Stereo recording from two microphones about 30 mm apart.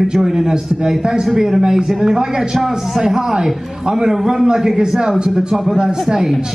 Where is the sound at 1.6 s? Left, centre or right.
Right.